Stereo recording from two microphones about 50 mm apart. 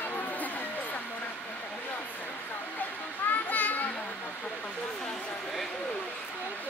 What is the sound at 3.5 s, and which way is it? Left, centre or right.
Children playing, left.